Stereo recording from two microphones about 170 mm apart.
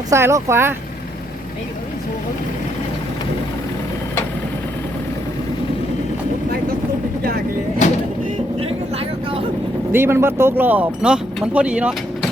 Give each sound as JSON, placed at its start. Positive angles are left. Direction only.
{"t": 0.1, "sound": "speech", "side_deg": -15}
{"t": 9.9, "sound": "speech", "side_deg": -15}